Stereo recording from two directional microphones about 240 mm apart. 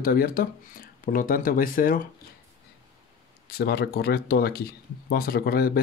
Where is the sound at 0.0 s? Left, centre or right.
Left.